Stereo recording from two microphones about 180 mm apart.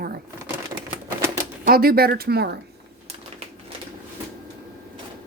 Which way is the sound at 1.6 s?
55° right (ahead or behind).